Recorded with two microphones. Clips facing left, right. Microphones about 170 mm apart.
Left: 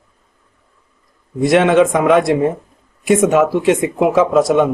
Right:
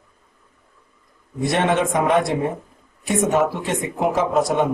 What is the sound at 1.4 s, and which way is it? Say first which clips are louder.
A man's voice: left 8 dB; 90° left.